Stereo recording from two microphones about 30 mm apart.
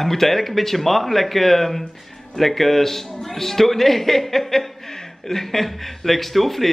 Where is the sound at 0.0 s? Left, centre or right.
Centre.